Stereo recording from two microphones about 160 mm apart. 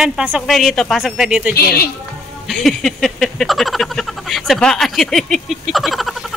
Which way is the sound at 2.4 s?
Centre (ahead or behind).